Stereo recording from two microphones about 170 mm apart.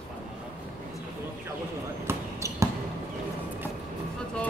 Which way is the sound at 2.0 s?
15° right (ahead or behind).